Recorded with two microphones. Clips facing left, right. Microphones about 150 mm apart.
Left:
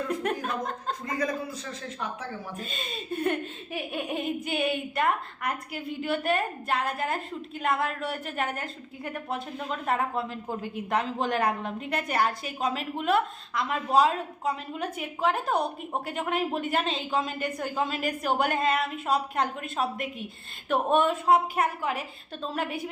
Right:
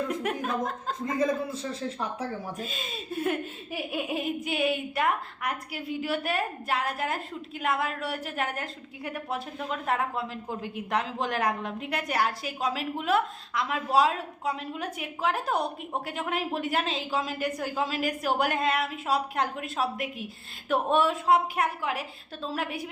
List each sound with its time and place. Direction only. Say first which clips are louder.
0.1 s a woman's voice: left 1 dB; centre (ahead or behind)
1.0 s a man's voice: right 4 dB; 25° right (ahead or behind)
2.6 s a woman's voice: even; centre (ahead or behind)